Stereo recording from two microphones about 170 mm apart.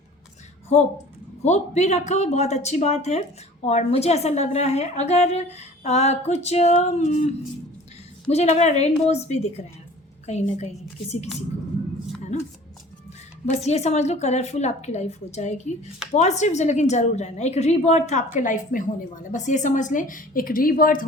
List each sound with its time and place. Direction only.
0.7 s speech: 40° left (ahead or behind)
13.4 s a woman's voice: 40° left (ahead or behind); by 21.0 s 55° left (ahead or behind)